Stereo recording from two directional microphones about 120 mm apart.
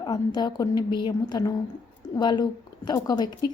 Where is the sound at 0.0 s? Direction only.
40° left (ahead or behind).